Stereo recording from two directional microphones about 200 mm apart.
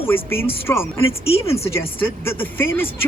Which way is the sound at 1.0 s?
30° left (ahead or behind).